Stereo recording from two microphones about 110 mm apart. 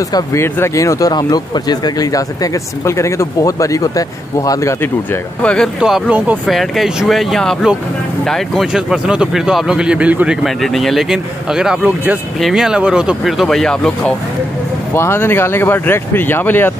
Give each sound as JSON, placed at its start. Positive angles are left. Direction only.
{"t": 0.1, "sound": "speech", "side_deg": 25}
{"t": 5.4, "sound": "speech", "side_deg": 10}
{"t": 5.8, "sound": "speech", "side_deg": -5}
{"t": 10.4, "sound": "speech", "side_deg": 0}
{"t": 15.0, "sound": "speech", "side_deg": 20}